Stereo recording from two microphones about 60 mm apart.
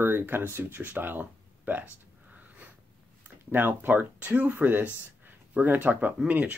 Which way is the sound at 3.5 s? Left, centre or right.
Right.